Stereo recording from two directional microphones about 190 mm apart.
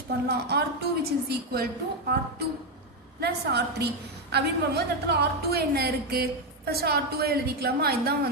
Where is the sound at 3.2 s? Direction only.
60° right (ahead or behind).